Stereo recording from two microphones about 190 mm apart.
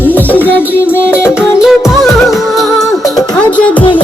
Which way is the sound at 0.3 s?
10° left (ahead or behind).